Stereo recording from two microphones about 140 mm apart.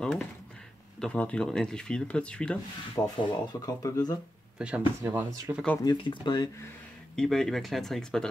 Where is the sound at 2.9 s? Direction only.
35° left (ahead or behind).